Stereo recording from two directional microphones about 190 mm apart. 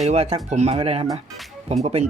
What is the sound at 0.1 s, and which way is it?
Speech, 30° right (ahead or behind).